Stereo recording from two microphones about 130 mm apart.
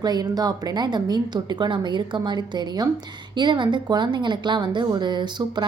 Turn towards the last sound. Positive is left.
turn(degrees=-35)  # may be behind; listen again after turning